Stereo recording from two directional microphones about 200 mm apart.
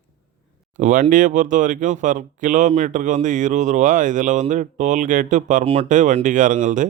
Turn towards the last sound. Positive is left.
turn(degrees=-40)  # may be behind; listen again after turning